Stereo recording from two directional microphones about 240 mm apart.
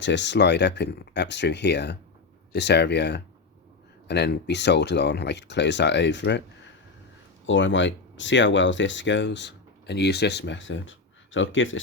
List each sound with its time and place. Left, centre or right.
0.0 s speech: left
7.4 s speech: left